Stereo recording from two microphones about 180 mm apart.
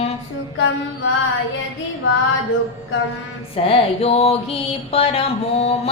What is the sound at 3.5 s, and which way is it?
Music, 35° left (ahead or behind).